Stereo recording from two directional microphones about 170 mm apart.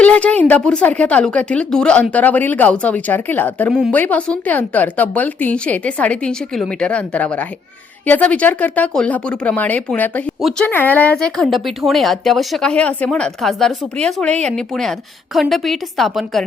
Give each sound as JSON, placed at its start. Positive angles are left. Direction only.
{"t": 0.0, "sound": "speech", "side_deg": 5}
{"t": 3.7, "sound": "speech", "side_deg": 0}